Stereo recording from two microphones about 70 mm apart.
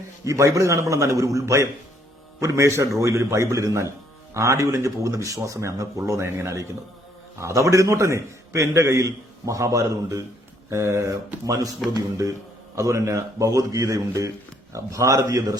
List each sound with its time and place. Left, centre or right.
0.3 s a man's voice: right